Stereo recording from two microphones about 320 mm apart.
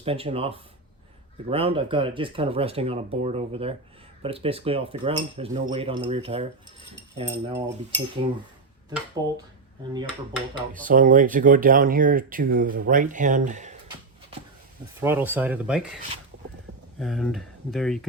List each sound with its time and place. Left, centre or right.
0.0 s speech: centre
9.2 s speech: centre
10.7 s speech: right
15.0 s speech: centre
17.0 s speech: centre